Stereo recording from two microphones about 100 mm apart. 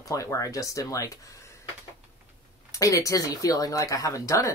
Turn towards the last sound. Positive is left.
turn(degrees=30)  # may be behind; listen again after turning